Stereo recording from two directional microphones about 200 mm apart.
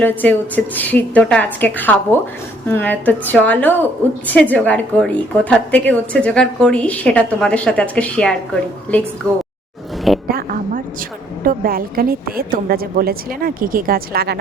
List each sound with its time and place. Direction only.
0.0 s a woman's voice: 10° left (ahead or behind)
10.2 s a sound: 45° right (ahead or behind)
11.4 s a woman's voice: 45° right (ahead or behind)